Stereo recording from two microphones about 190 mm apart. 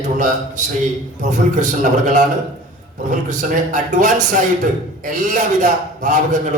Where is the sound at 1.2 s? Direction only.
40° right (ahead or behind).